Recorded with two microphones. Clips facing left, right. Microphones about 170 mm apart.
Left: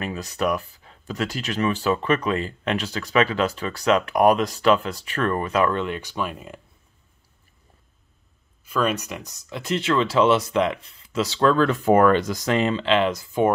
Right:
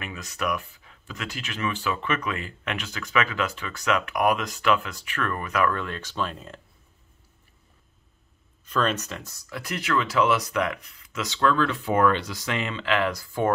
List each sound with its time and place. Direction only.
0.0 s speech: 35° left (ahead or behind); by 6.6 s 10° left (ahead or behind)
8.6 s speech: 10° left (ahead or behind)